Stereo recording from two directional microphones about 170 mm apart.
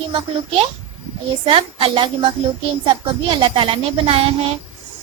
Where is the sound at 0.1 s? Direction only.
35° right (ahead or behind).